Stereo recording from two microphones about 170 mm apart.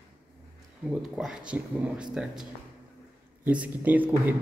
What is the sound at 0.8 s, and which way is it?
Speech, 5° right (ahead or behind).